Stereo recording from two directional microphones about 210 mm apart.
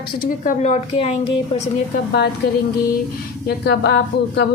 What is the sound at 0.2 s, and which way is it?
A woman's voice, 40° left (ahead or behind).